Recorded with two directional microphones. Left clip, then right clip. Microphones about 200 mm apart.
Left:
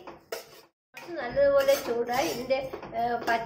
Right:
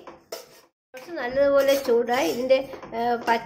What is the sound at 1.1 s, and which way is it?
Speech, 50° right (ahead or behind).